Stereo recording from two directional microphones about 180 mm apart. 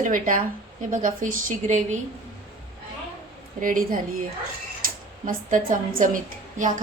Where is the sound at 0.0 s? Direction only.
50° right (ahead or behind).